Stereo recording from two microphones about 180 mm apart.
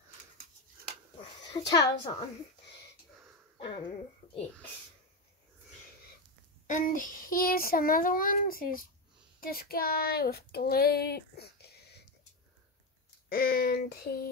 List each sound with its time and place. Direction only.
1.5 s a woman's voice: 20° left (ahead or behind)
6.7 s a child's voice: 45° left (ahead or behind); by 12.0 s 65° left (ahead or behind)
13.3 s a sound: 55° left (ahead or behind)